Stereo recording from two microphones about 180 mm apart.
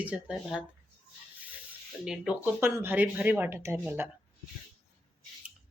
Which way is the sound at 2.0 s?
5° right (ahead or behind).